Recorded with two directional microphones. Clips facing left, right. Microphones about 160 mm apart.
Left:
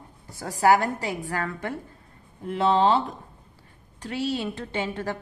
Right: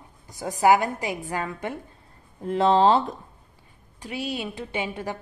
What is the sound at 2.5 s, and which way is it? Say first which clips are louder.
Speech: right 2 dB; 35° right (ahead or behind).